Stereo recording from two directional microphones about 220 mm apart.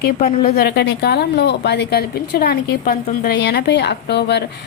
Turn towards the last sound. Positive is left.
turn(degrees=50)  # may be behind; listen again after turning